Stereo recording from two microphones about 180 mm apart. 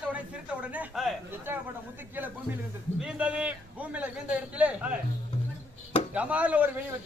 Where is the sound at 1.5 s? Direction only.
15° right (ahead or behind).